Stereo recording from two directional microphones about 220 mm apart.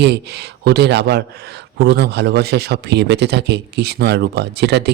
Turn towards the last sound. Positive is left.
turn(degrees=-50)  # may be behind; listen again after turning